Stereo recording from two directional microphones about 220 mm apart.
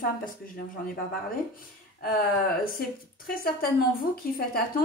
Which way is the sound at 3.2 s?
40° left (ahead or behind).